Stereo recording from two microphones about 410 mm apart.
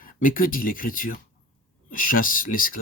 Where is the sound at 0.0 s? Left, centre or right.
Centre.